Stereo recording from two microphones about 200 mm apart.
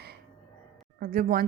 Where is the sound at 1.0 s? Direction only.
45° right (ahead or behind).